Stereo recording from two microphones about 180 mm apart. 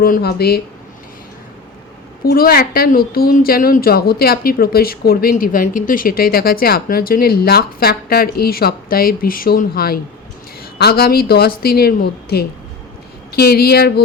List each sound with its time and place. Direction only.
0.0 s a woman's voice: 55° left (ahead or behind)
2.3 s a woman's voice: 55° left (ahead or behind)